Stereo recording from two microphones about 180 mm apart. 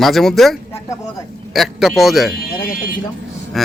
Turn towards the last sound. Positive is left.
turn(degrees=0)  # may be behind; listen again after turning